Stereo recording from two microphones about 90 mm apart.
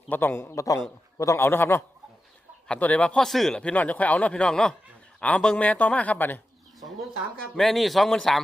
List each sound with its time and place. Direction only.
0.1 s a man's voice: 20° left (ahead or behind)
0.5 s a man's voice: 40° left (ahead or behind)
2.6 s speech: 15° left (ahead or behind)
3.2 s speech: 5° left (ahead or behind); by 6.4 s 20° left (ahead or behind)
7.5 s speech: 5° left (ahead or behind)